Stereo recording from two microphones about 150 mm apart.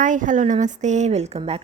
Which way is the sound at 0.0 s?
60° right (ahead or behind).